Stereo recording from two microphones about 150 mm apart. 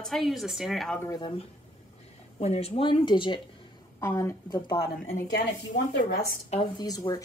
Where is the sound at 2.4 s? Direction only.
45° left (ahead or behind).